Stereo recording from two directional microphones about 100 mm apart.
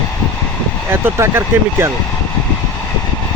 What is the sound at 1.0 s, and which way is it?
Speech, 25° right (ahead or behind).